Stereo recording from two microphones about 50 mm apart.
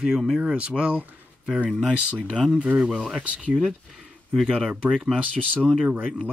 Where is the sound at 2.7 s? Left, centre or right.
Centre.